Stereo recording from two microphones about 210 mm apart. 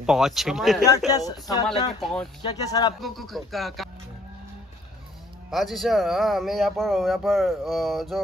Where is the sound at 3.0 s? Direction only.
Centre (ahead or behind).